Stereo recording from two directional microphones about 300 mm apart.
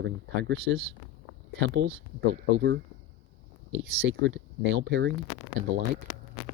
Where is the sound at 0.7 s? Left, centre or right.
Right.